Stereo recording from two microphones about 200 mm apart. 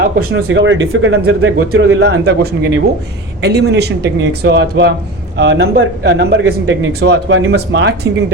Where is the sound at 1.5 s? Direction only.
55° right (ahead or behind).